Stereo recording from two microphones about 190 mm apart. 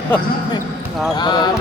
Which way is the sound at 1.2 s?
25° left (ahead or behind).